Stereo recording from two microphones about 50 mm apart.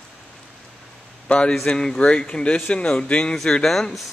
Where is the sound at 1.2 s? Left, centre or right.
Left; by 4.1 s centre.